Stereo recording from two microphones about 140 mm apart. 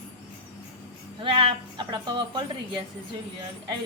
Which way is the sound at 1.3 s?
35° right (ahead or behind).